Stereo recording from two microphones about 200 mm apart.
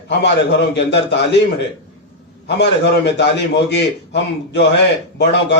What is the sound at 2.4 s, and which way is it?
A man's voice, 60° left (ahead or behind).